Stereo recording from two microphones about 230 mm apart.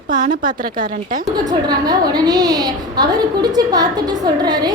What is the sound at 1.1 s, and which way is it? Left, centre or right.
A woman's voice, centre.